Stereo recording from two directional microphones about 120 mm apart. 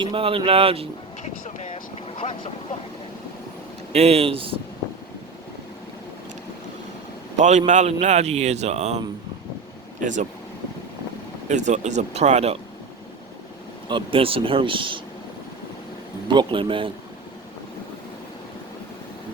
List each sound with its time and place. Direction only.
0.0 s speech: 45° right (ahead or behind)
1.2 s vehicle: 75° left (ahead or behind); by 2.5 s 55° left (ahead or behind)
3.9 s speech: 60° right (ahead or behind)
7.3 s a man's voice: 80° right
10.0 s speech: 90° right
11.4 s speech: 80° right; by 12.5 s 65° right (ahead or behind)
13.8 s speech: 45° right (ahead or behind)
16.3 s speech: 40° right (ahead or behind)